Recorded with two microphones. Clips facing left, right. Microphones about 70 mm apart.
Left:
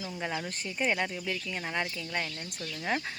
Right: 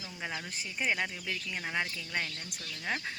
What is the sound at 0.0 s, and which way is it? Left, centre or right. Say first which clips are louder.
Speech: left 5 dB; centre.